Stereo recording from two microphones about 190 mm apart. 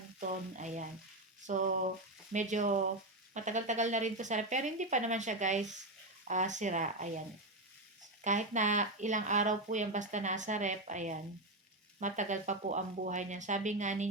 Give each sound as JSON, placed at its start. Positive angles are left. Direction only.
{"t": 0.2, "sound": "speech", "side_deg": -40}
{"t": 8.2, "sound": "speech", "side_deg": -40}